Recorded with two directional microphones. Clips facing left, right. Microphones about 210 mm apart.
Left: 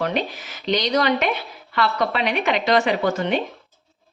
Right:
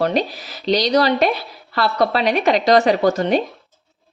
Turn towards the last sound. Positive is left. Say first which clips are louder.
# right 5 dB
turn(degrees=-40)  # may be behind; listen again after turning